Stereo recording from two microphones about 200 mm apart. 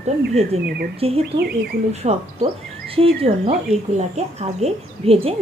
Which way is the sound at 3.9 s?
35° right (ahead or behind).